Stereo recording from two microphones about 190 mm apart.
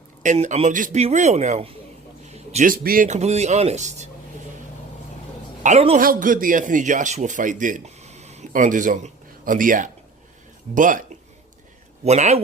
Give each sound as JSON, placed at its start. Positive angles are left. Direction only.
{"t": 0.2, "sound": "speech", "side_deg": -40}
{"t": 5.6, "sound": "speech", "side_deg": -35}
{"t": 6.0, "sound": "speech", "side_deg": -45}
{"t": 12.0, "sound": "speech", "side_deg": -35}